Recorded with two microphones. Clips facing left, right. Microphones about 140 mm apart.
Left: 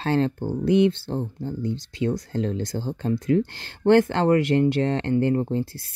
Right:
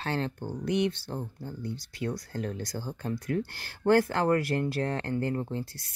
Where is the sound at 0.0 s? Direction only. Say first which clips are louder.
Left 9 dB; 30° left (ahead or behind).